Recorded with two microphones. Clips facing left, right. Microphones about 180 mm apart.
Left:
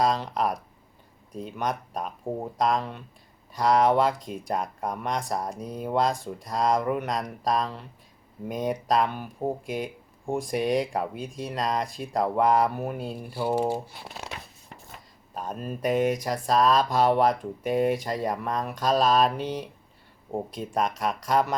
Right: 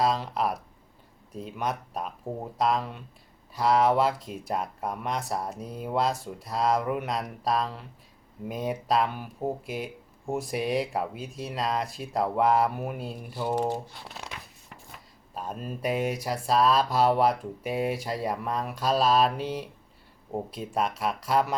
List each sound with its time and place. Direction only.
0.0 s speech: 5° right (ahead or behind)
2.3 s speech: 10° left (ahead or behind)
2.6 s speech: 5° right (ahead or behind)
13.1 s speech: 10° left (ahead or behind)
14.3 s a sound: 35° left (ahead or behind)
15.8 s speech: 5° right (ahead or behind)